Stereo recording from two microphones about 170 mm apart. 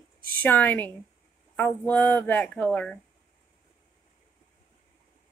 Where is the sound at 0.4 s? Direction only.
10° left (ahead or behind).